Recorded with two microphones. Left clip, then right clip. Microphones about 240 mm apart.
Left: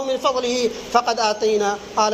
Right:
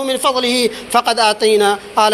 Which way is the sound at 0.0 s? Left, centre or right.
Right.